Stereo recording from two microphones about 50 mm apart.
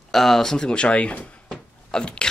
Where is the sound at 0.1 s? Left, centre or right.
Centre; by 1.4 s left.